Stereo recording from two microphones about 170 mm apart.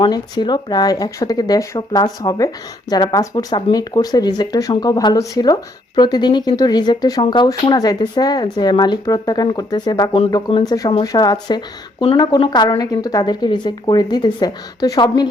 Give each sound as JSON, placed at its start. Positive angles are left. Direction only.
{"t": 0.0, "sound": "speech", "side_deg": 25}